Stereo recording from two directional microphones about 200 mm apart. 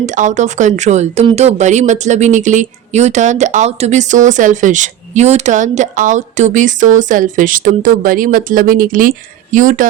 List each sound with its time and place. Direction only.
0.0 s speech: 35° right (ahead or behind)